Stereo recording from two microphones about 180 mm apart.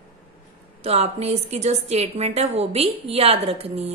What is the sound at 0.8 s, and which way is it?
A woman's voice, 35° right (ahead or behind).